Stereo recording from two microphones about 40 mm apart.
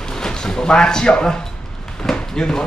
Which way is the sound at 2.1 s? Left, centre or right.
Centre.